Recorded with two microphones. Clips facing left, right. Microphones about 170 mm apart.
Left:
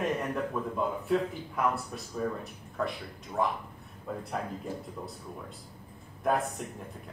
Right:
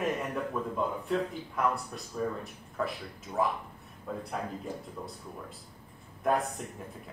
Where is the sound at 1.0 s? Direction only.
Centre (ahead or behind).